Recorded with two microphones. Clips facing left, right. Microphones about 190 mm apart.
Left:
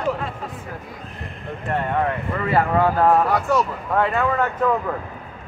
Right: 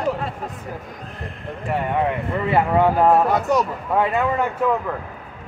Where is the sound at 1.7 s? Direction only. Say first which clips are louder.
Right 1 dB; 10° right (ahead or behind).